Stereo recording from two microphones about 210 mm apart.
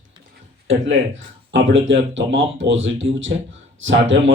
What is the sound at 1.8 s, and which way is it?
Speech, 65° right (ahead or behind).